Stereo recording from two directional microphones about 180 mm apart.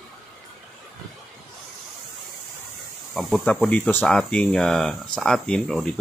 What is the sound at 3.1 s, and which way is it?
Speech, centre (ahead or behind).